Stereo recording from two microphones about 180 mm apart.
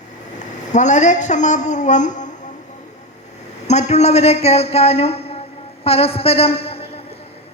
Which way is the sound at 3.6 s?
40° left (ahead or behind).